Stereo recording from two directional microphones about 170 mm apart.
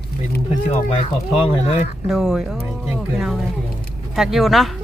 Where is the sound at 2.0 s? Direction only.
5° right (ahead or behind).